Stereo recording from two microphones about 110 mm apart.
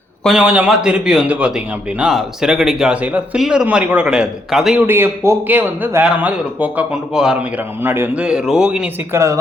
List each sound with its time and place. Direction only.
0.3 s a man's voice: 10° right (ahead or behind)
4.9 s a man's voice: 20° right (ahead or behind)
7.8 s a man's voice: 20° right (ahead or behind)
9.1 s a woman's voice: 25° right (ahead or behind)